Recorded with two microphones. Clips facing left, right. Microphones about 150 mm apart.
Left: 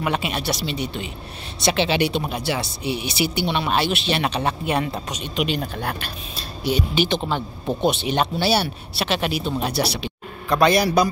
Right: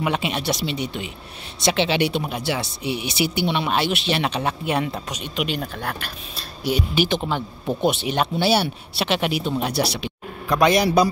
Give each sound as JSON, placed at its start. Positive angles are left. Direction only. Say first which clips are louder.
{"t": 0.0, "sound": "a man's voice", "louder": "even", "side_deg": -15}